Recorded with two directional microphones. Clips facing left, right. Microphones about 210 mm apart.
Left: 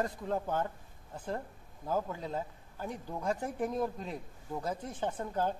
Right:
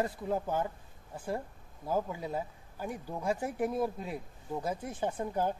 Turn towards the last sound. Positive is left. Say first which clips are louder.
# right 1 dB
turn(degrees=-10)  # may be behind; listen again after turning